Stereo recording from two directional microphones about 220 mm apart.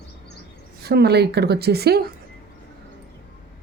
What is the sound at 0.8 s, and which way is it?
Speech, 45° right (ahead or behind).